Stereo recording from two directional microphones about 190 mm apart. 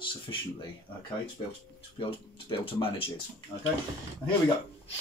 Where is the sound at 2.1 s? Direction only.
25° left (ahead or behind).